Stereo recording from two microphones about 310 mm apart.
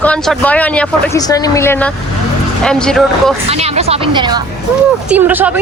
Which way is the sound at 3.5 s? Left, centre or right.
Centre.